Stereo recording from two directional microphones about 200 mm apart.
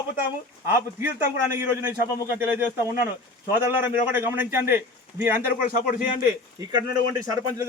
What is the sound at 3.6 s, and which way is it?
Speech, 10° right (ahead or behind).